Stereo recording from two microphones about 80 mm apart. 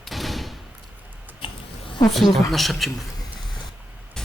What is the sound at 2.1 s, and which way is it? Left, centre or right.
Speech, centre.